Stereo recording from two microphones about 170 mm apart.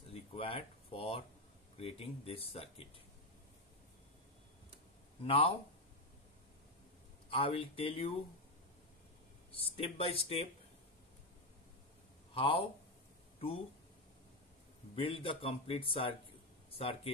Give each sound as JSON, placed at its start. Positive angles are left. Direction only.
{"t": 0.1, "sound": "a sound", "side_deg": 35}
{"t": 1.8, "sound": "speech", "side_deg": 35}
{"t": 5.2, "sound": "speech", "side_deg": 35}
{"t": 7.2, "sound": "speech", "side_deg": 35}
{"t": 9.5, "sound": "speech", "side_deg": 35}
{"t": 12.4, "sound": "speech", "side_deg": 30}
{"t": 15.0, "sound": "speech", "side_deg": 30}